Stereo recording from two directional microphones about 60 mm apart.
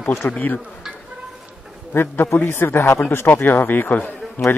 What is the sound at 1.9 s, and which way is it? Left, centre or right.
Speech, left.